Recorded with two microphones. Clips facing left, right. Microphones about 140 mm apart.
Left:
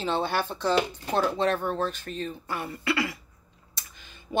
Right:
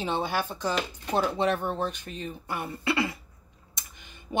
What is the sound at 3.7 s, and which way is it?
Computer keyboard, 20° right (ahead or behind).